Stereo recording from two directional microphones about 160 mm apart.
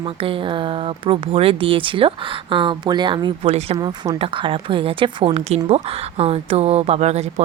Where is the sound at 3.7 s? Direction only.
25° right (ahead or behind); by 7.4 s 40° right (ahead or behind).